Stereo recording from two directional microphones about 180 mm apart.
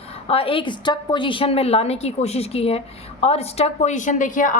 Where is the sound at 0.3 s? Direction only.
30° left (ahead or behind).